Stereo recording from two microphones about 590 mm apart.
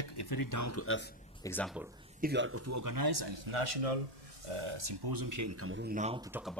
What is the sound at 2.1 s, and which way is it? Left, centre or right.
Speech, centre.